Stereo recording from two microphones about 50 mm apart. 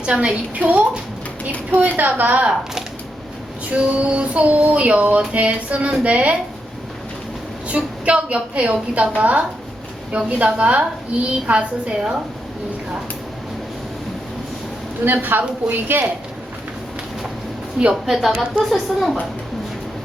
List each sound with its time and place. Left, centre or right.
0.0 s a woman's voice: right
3.7 s a woman's voice: right
7.7 s a woman's voice: right
15.0 s a woman's voice: right
18.0 s speech: centre